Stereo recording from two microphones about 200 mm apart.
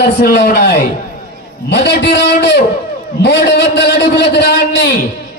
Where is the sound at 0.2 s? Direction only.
50° left (ahead or behind).